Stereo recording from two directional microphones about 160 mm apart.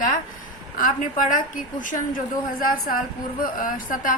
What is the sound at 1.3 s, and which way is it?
A woman's voice, 55° left (ahead or behind).